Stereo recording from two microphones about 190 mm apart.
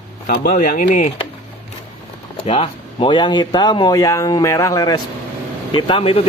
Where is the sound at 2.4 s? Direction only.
30° left (ahead or behind).